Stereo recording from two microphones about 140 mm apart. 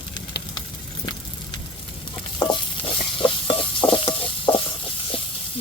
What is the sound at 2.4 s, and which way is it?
Stir, 35° left (ahead or behind).